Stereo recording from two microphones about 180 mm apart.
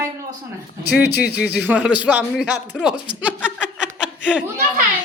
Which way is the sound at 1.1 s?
65° left (ahead or behind).